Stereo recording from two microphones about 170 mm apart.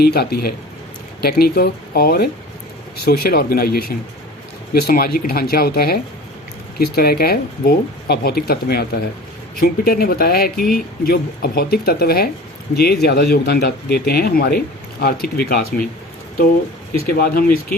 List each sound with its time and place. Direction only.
0.0 s speech: 65° left (ahead or behind)
17.2 s speech: 60° left (ahead or behind)